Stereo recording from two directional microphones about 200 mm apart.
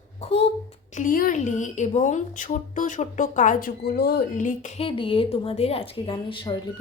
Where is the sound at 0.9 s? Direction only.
45° left (ahead or behind).